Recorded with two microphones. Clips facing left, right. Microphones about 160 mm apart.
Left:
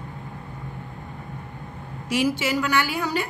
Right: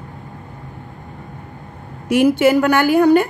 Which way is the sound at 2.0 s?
55° right (ahead or behind).